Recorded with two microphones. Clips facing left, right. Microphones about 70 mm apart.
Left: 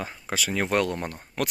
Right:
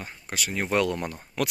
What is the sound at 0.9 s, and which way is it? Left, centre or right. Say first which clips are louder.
Speech: right 1 dB; left.